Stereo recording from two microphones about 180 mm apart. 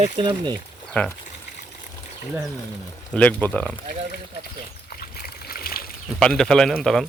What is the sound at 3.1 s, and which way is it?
Speech, 10° left (ahead or behind).